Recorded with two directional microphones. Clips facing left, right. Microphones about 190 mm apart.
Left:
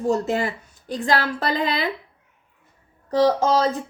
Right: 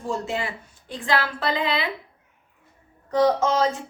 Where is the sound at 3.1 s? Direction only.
35° left (ahead or behind).